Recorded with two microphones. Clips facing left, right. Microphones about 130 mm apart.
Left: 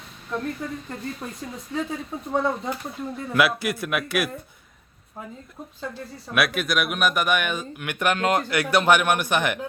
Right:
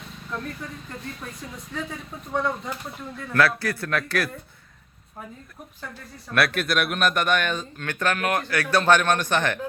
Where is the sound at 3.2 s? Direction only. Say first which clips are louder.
Even; 20° left (ahead or behind).